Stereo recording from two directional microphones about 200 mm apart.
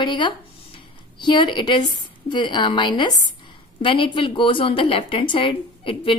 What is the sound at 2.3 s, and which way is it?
A woman's voice, 25° left (ahead or behind).